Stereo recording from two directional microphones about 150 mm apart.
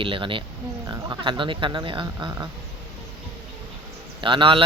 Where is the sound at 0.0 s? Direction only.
35° right (ahead or behind).